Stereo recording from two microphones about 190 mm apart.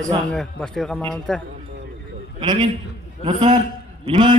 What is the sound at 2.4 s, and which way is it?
A man's voice, 25° right (ahead or behind).